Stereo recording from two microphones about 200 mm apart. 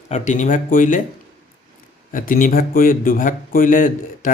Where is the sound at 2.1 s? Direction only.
40° left (ahead or behind).